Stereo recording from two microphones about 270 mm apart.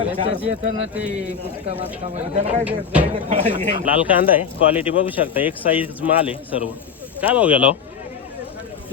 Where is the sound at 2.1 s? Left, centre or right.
Right.